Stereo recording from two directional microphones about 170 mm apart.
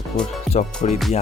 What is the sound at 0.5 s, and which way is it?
Music, 45° left (ahead or behind).